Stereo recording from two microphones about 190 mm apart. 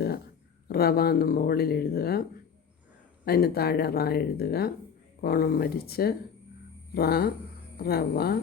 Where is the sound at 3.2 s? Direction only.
55° left (ahead or behind).